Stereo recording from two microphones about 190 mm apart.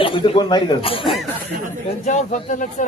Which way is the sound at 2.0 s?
40° left (ahead or behind).